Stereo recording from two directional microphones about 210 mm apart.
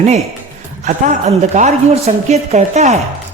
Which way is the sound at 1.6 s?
35° right (ahead or behind).